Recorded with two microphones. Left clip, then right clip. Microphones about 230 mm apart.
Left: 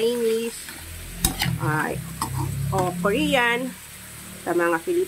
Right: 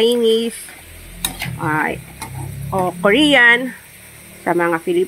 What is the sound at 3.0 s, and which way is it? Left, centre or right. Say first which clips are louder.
Speech: right 11 dB; right.